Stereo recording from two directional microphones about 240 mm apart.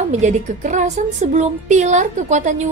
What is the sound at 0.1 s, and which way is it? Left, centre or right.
A woman's voice, right.